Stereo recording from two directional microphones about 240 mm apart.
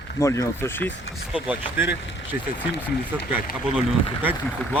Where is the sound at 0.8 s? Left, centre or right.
Left.